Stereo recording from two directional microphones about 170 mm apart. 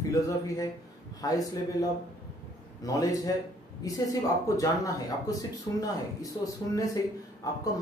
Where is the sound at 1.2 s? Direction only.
20° left (ahead or behind).